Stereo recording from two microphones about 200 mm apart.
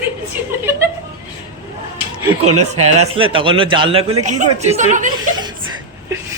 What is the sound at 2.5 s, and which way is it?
Speech, 90° right.